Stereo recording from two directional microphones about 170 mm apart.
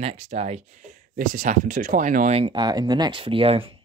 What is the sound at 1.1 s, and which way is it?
Speech, 50° right (ahead or behind).